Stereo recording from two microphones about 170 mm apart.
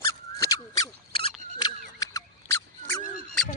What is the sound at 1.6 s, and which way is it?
Squeak, 25° left (ahead or behind).